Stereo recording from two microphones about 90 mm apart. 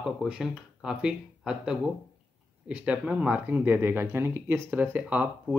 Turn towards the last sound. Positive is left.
turn(degrees=-15)  # may be behind; listen again after turning